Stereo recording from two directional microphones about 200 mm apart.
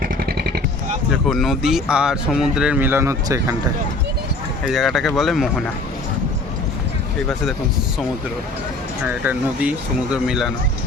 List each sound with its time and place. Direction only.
0.3 s vehicle: 55° right (ahead or behind)
1.1 s speech: centre (ahead or behind); by 3.5 s 15° right (ahead or behind)
4.6 s speech: centre (ahead or behind)
10.2 s speech: centre (ahead or behind)